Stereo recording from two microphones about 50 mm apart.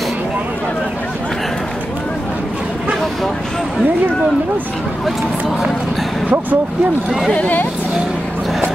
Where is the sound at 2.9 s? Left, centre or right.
Centre.